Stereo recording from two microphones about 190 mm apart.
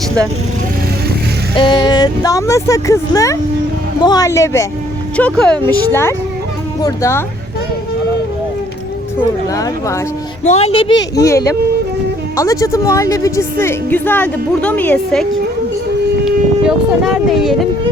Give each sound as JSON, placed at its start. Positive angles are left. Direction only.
{"t": 1.5, "sound": "a woman's voice", "side_deg": 25}
{"t": 9.6, "sound": "a woman's voice", "side_deg": 15}
{"t": 10.4, "sound": "a woman's voice", "side_deg": 35}